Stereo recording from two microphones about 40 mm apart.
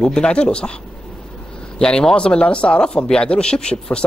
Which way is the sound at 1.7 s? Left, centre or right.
Centre.